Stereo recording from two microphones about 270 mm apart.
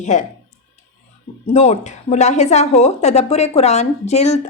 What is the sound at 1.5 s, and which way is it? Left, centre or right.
Speech, left.